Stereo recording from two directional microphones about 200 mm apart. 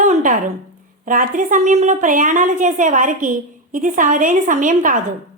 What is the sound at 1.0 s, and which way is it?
A woman's voice, 40° right (ahead or behind).